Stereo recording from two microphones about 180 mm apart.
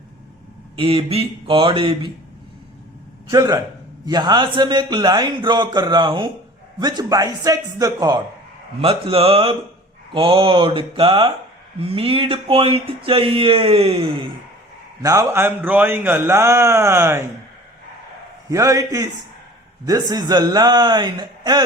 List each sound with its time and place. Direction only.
0.8 s a man's voice: 30° right (ahead or behind)
3.3 s a man's voice: 20° right (ahead or behind)
8.8 s a man's voice: 30° right (ahead or behind)
15.0 s a man's voice: 20° right (ahead or behind)
18.4 s a man's voice: 20° right (ahead or behind)